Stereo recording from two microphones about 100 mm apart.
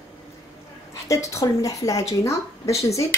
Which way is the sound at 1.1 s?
30° left (ahead or behind).